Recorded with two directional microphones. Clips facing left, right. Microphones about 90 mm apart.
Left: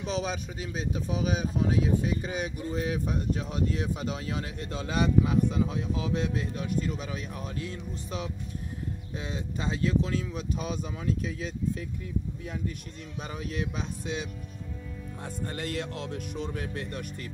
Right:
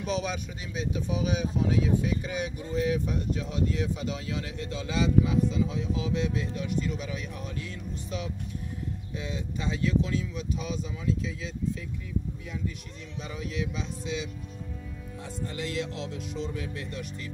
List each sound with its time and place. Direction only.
0.0 s speech: 35° left (ahead or behind); by 11.8 s 50° left (ahead or behind)
13.2 s speech: 45° left (ahead or behind)